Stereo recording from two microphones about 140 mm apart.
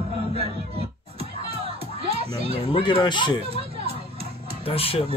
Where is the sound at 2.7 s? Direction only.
35° left (ahead or behind).